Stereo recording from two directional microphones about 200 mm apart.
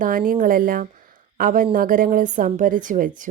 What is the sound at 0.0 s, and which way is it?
A woman's voice, 45° right (ahead or behind).